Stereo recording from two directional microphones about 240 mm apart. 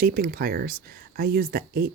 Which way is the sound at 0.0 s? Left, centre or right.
Right.